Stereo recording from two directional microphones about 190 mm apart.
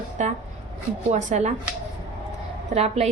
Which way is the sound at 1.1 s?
35° right (ahead or behind).